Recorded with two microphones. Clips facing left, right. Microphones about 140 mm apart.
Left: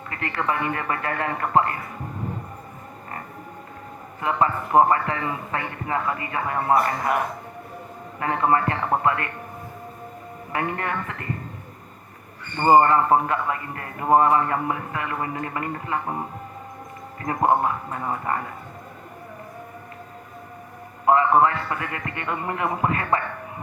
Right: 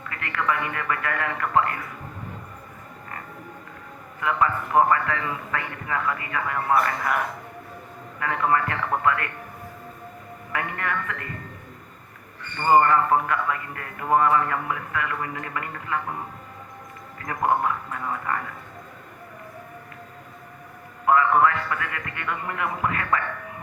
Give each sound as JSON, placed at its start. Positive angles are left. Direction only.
{"t": 0.0, "sound": "a man's voice", "side_deg": 30}
{"t": 4.2, "sound": "a man's voice", "side_deg": 30}
{"t": 8.2, "sound": "a man's voice", "side_deg": 30}
{"t": 10.5, "sound": "a man's voice", "side_deg": 30}
{"t": 12.5, "sound": "a man's voice", "side_deg": 30}
{"t": 21.0, "sound": "a man's voice", "side_deg": 30}